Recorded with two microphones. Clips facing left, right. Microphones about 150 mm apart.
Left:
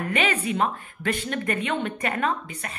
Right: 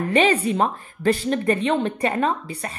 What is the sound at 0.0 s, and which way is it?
Speech, 35° right (ahead or behind).